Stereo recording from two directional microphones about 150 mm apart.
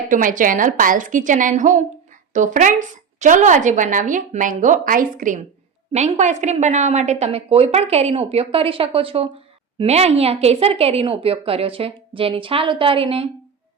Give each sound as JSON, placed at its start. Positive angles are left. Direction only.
{"t": 0.1, "sound": "a woman's voice", "side_deg": -60}
{"t": 5.9, "sound": "a woman's voice", "side_deg": -50}